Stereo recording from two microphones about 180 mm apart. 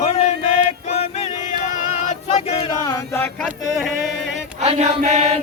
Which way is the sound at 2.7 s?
20° left (ahead or behind).